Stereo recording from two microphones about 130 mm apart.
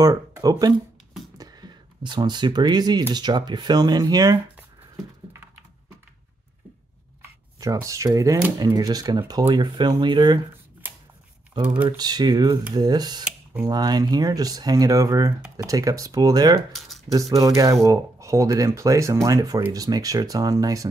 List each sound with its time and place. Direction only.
0.0 s speech: 30° right (ahead or behind)
7.2 s shuffling cards: 25° right (ahead or behind)
8.5 s speech: 30° right (ahead or behind)
11.6 s speech: 35° right (ahead or behind)
16.7 s a sound: centre (ahead or behind)
17.1 s speech: 25° right (ahead or behind)